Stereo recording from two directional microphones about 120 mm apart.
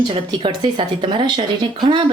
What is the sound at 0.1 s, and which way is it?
A woman's voice, 45° right (ahead or behind).